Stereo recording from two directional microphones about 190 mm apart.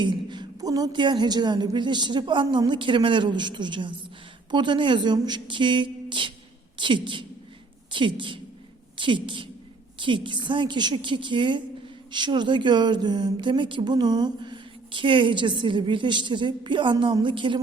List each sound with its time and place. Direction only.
0.0 s speech: 25° right (ahead or behind)